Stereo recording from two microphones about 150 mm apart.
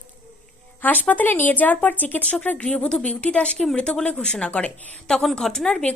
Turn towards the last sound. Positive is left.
turn(degrees=5)  # may be behind; listen again after turning